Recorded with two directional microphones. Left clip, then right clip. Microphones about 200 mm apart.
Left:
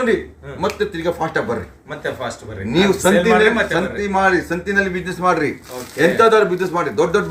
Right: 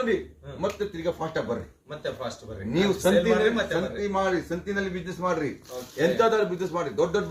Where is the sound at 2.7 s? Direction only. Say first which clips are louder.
Left 8 dB; 15° left (ahead or behind).